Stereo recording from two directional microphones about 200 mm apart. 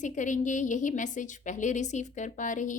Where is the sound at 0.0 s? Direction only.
40° left (ahead or behind).